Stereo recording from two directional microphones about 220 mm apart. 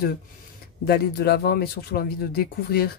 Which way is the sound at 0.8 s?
45° left (ahead or behind).